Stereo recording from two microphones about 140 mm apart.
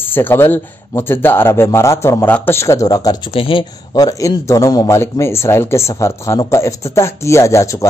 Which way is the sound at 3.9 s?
25° left (ahead or behind).